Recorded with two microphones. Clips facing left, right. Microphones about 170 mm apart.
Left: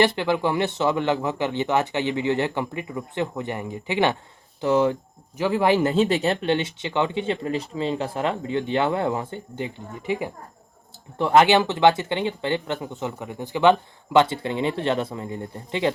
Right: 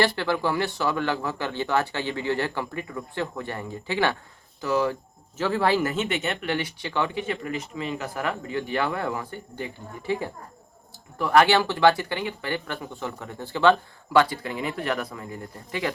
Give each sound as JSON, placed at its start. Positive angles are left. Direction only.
{"t": 0.0, "sound": "speech", "side_deg": 20}